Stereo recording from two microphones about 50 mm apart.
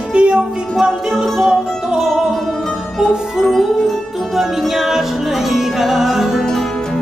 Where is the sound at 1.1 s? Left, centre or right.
Centre.